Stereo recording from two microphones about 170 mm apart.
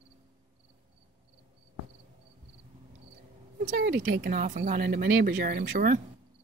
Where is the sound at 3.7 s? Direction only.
70° right (ahead or behind).